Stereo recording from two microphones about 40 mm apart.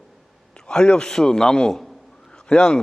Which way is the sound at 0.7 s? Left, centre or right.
Centre.